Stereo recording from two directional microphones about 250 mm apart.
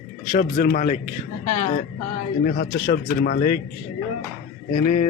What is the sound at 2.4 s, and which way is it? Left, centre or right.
A man's voice, left.